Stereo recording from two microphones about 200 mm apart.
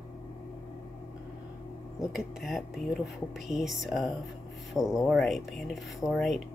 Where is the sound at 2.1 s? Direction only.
Centre (ahead or behind).